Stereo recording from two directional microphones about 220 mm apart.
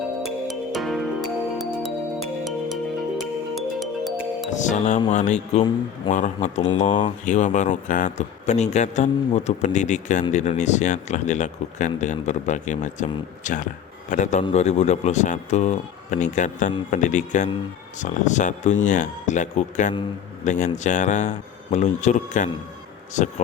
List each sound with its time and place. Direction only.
0.2 s music: centre (ahead or behind)
4.5 s speech: 35° left (ahead or behind)